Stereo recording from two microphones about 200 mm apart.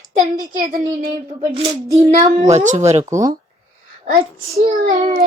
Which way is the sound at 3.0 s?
15° right (ahead or behind).